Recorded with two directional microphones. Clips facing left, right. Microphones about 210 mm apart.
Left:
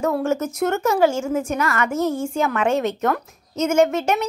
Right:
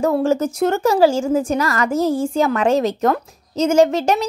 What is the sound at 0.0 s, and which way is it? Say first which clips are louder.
A woman's voice: right 4 dB; 30° right (ahead or behind).